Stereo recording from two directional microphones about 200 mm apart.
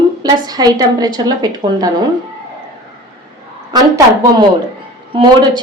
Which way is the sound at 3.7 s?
20° right (ahead or behind).